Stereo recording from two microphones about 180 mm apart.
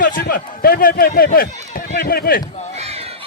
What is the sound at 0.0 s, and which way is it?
A man's voice, 50° left (ahead or behind).